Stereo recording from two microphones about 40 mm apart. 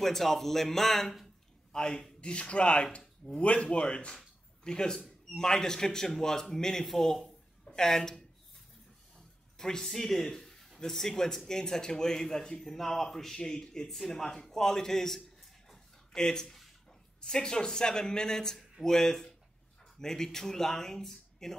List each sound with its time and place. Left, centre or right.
0.0 s speech: centre
1.7 s speech: centre
9.6 s speech: centre
15.1 s a sound: centre
16.2 s speech: centre